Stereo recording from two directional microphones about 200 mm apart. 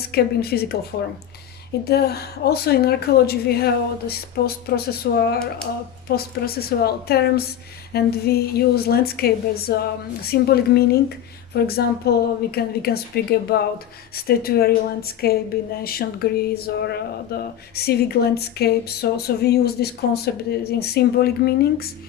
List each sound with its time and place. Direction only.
0.0 s speech: 50° left (ahead or behind)
1.8 s speech: 55° left (ahead or behind)